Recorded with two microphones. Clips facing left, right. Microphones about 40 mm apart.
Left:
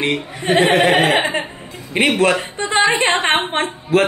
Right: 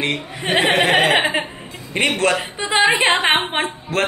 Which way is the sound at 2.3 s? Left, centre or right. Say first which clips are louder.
Left 1 dB; centre.